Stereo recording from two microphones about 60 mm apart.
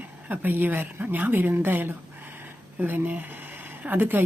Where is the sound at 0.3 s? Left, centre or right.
Right.